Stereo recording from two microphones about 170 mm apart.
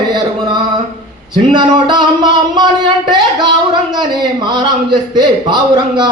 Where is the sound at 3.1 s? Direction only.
25° right (ahead or behind).